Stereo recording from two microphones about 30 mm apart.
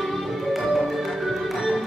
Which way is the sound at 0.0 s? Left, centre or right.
Centre.